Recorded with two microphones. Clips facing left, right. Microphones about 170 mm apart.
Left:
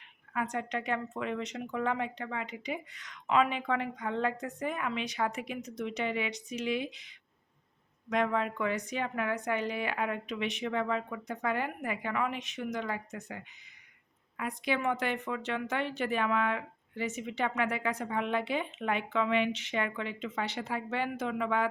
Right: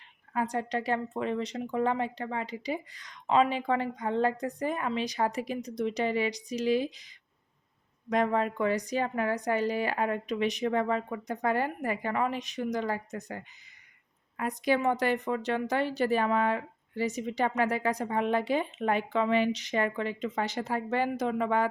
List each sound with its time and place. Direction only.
0.3 s speech: 35° right (ahead or behind)
8.1 s speech: 40° right (ahead or behind)